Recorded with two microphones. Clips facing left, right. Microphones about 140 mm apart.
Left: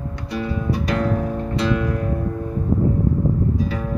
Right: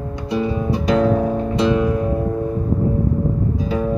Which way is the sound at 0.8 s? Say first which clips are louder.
Right 8 dB; 20° right (ahead or behind).